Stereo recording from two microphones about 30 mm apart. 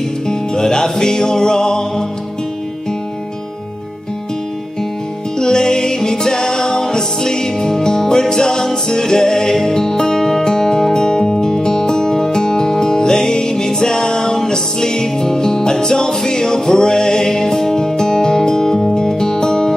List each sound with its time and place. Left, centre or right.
0.3 s music: left
5.4 s music: left